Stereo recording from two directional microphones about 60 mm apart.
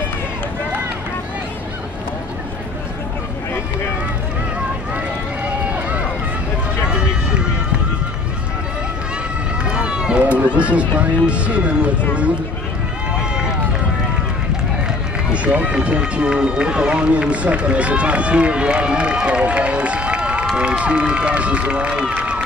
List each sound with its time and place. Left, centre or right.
5.7 s run: right
9.7 s run: centre
15.3 s speech: right
22.1 s run: centre